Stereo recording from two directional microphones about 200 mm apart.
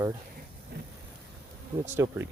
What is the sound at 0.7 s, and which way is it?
Vehicle, 50° right (ahead or behind).